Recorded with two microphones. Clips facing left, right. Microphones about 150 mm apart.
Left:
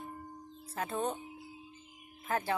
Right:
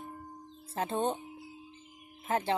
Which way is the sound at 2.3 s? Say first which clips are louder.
Right 3 dB; 25° right (ahead or behind).